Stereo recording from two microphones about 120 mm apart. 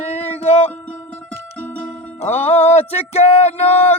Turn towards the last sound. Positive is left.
turn(degrees=65)  # may be behind; listen again after turning